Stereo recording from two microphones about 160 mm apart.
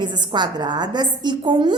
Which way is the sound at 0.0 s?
30° right (ahead or behind).